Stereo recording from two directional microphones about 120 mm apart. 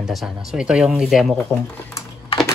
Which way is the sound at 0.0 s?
Centre (ahead or behind).